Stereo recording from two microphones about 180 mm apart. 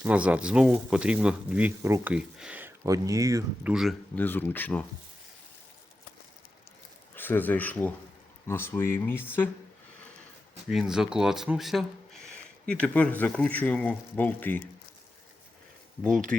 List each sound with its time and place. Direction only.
0.0 s speech: 5° right (ahead or behind)
3.6 s speech: 5° right (ahead or behind)
7.2 s speech: 10° left (ahead or behind)
10.7 s speech: 5° right (ahead or behind)
16.0 s speech: 5° left (ahead or behind)